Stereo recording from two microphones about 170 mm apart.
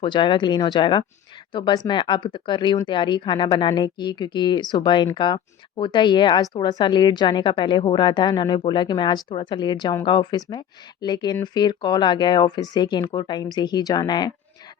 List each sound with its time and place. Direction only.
0.0 s speech: 30° left (ahead or behind)